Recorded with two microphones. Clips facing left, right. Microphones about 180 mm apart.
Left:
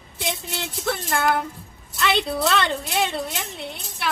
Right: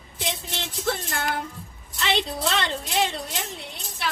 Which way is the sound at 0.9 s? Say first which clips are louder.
Left 5 dB; 55° left (ahead or behind).